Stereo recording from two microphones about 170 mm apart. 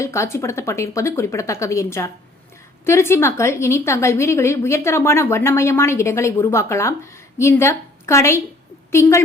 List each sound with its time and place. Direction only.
0.0 s a woman's voice: 15° left (ahead or behind)